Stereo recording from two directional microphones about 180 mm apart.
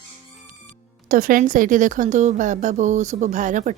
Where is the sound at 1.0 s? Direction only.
50° right (ahead or behind).